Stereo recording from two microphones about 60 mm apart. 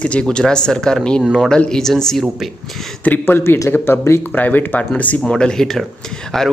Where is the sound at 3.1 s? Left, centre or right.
Left.